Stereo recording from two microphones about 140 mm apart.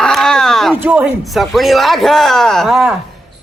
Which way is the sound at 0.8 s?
10° right (ahead or behind).